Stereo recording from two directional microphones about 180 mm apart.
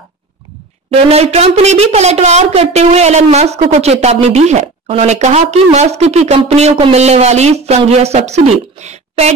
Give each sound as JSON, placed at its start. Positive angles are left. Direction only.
{"t": 1.1, "sound": "a woman's voice", "side_deg": -35}